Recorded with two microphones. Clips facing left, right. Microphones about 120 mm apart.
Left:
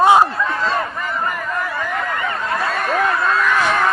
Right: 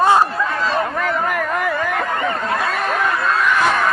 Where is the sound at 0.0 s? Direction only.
15° left (ahead or behind).